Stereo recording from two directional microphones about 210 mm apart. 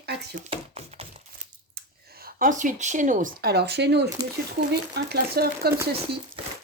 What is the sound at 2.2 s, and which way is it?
Speech, 40° right (ahead or behind).